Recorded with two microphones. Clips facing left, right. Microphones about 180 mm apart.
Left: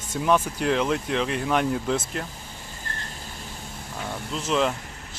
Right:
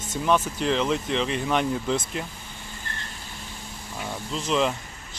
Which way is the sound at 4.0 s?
Centre (ahead or behind).